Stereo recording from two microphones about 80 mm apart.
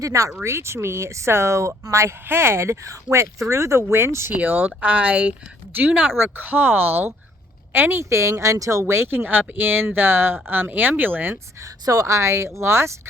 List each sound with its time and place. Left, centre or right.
0.0 s speech: right
11.6 s speech: right